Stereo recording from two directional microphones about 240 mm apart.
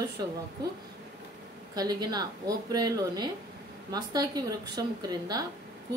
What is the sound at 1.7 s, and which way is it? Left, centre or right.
A woman's voice, centre.